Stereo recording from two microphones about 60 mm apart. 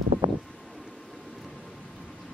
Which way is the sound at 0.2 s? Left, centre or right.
Right.